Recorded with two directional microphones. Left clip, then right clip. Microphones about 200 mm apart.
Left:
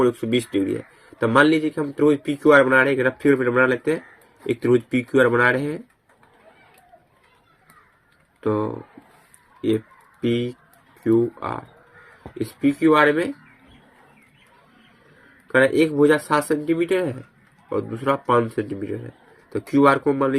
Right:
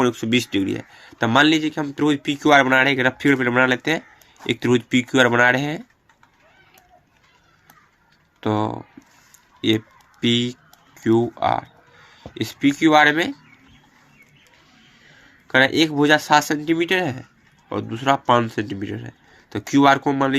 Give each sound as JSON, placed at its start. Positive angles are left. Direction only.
{"t": 0.0, "sound": "speech", "side_deg": -45}
{"t": 8.4, "sound": "speech", "side_deg": -45}
{"t": 10.2, "sound": "speech", "side_deg": -45}
{"t": 15.5, "sound": "speech", "side_deg": -45}